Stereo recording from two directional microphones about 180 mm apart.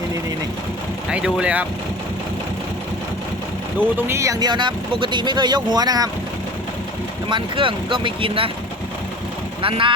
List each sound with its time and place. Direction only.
1.1 s speech: 5° right (ahead or behind)
3.8 s speech: 15° right (ahead or behind)
7.3 s speech: 25° right (ahead or behind)
9.6 s speech: 30° right (ahead or behind)